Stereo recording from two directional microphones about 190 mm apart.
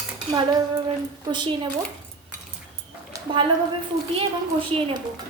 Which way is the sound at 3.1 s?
25° right (ahead or behind).